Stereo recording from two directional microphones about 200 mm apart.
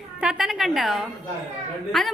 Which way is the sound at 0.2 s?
Centre (ahead or behind).